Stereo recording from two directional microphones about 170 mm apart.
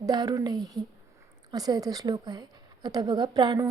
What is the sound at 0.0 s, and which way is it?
A woman's voice, 25° right (ahead or behind).